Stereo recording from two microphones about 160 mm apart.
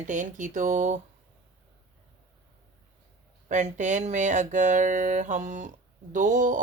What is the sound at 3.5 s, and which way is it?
Speech, 50° right (ahead or behind).